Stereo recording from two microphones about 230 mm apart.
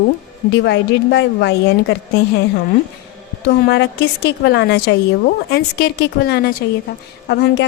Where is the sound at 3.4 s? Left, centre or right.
Left.